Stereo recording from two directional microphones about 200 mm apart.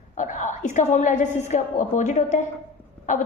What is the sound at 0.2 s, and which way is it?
A woman's voice, 35° left (ahead or behind).